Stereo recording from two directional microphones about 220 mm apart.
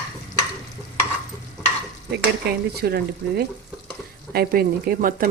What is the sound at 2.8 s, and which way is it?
Speech, 45° right (ahead or behind).